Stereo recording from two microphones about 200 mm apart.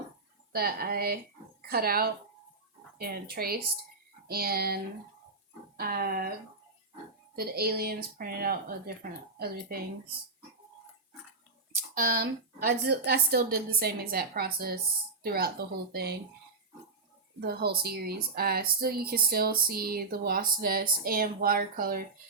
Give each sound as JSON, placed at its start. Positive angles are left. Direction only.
{"t": 0.5, "sound": "a woman's voice", "side_deg": -50}
{"t": 7.3, "sound": "a woman's voice", "side_deg": -50}
{"t": 11.9, "sound": "a woman's voice", "side_deg": -45}
{"t": 17.4, "sound": "a woman's voice", "side_deg": -50}